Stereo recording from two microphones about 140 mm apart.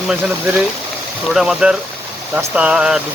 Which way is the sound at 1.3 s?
5° right (ahead or behind).